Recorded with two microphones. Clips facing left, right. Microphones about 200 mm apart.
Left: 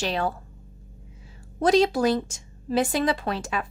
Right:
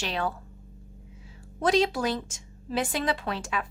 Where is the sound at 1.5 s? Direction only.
40° left (ahead or behind).